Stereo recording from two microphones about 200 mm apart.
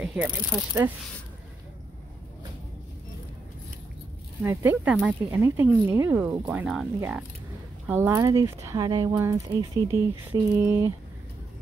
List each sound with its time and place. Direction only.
0.0 s speech: 5° right (ahead or behind)
4.4 s speech: 10° right (ahead or behind)